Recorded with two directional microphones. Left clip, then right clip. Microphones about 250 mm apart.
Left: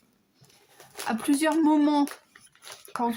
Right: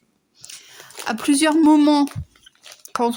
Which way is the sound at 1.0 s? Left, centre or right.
Right.